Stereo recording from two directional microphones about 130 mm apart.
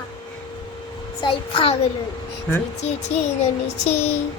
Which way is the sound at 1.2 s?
45° left (ahead or behind).